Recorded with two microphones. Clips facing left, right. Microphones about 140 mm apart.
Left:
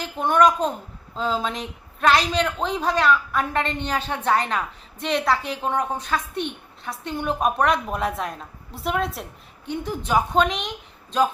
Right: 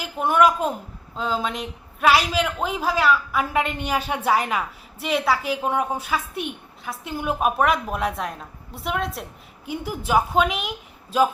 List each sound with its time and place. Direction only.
0.0 s a woman's voice: 5° right (ahead or behind)